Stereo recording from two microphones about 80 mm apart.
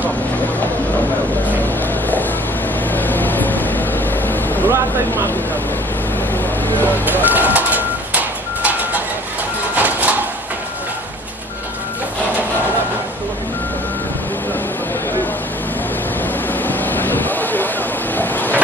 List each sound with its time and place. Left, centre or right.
2.9 s vehicle: left
4.6 s vehicle: right
6.7 s vehicle: left
7.2 s a sound: right
16.6 s vehicle: left